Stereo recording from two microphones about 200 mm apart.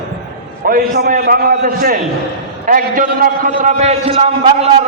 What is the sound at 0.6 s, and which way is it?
A man's voice, 50° right (ahead or behind).